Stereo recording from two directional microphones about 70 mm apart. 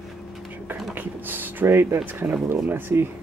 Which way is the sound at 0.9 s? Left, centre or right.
Right.